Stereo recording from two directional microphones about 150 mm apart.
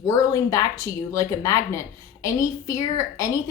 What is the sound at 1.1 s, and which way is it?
A woman's voice, 20° left (ahead or behind).